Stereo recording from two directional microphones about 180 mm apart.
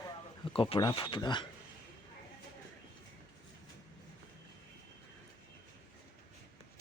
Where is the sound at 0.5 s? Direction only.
30° left (ahead or behind).